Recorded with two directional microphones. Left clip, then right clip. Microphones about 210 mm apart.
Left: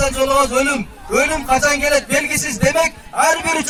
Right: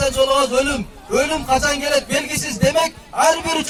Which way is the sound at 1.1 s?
65° right (ahead or behind).